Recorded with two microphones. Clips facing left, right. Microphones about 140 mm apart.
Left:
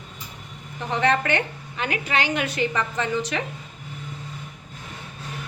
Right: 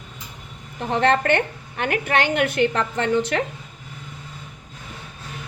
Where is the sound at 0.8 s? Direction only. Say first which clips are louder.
Right 3 dB; 55° right (ahead or behind).